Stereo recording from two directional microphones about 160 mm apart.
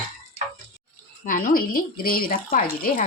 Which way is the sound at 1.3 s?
60° left (ahead or behind).